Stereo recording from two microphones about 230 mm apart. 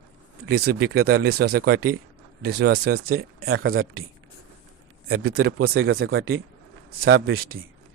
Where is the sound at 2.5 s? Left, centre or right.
Right.